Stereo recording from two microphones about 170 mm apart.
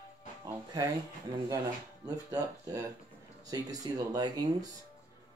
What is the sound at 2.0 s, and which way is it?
Speech, 20° right (ahead or behind).